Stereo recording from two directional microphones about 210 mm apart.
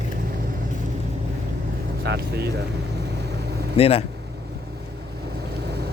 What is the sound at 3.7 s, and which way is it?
Speech, 30° left (ahead or behind).